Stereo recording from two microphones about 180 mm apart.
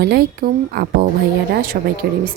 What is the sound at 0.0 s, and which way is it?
Speech, 55° right (ahead or behind).